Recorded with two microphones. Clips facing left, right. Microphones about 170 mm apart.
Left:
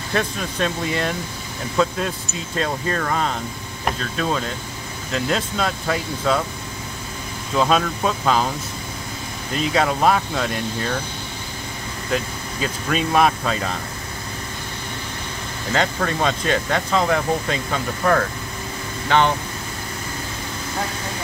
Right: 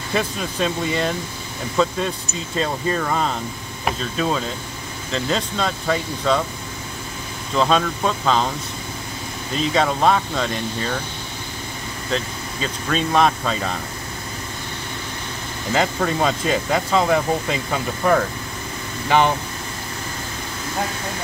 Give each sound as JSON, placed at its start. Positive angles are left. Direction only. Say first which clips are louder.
{"t": 0.1, "sound": "speech", "louder": "even", "side_deg": 0}
{"t": 7.5, "sound": "speech", "louder": "even", "side_deg": 5}
{"t": 9.6, "sound": "speech", "louder": "even", "side_deg": 5}
{"t": 12.1, "sound": "speech", "louder": "left 1 dB", "side_deg": 5}
{"t": 15.7, "sound": "speech", "louder": "right 1 dB", "side_deg": -5}